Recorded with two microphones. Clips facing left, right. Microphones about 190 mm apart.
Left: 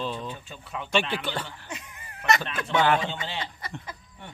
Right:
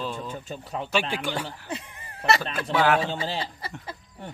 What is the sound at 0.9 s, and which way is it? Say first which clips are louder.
Speech: left 1 dB; 10° right (ahead or behind).